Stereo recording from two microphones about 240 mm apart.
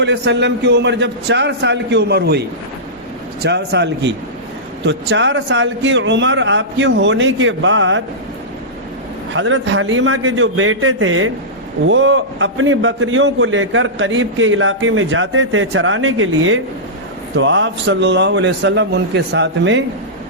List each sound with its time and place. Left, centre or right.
0.0 s a man's voice: right
3.4 s a man's voice: right
9.3 s a man's voice: right